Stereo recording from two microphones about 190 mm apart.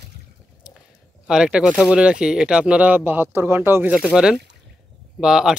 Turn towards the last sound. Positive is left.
turn(degrees=-5)  # may be behind; listen again after turning